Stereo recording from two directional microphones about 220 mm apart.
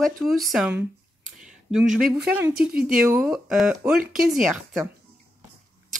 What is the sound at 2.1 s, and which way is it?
Speech, 5° right (ahead or behind).